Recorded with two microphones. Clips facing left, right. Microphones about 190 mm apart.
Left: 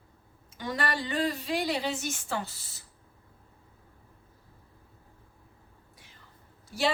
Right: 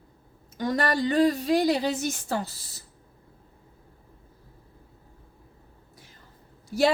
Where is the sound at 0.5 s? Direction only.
40° right (ahead or behind).